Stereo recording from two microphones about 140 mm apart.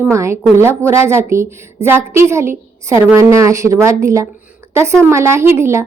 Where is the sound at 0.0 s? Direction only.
20° right (ahead or behind).